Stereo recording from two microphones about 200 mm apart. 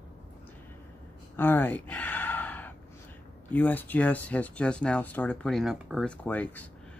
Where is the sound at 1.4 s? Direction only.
10° left (ahead or behind).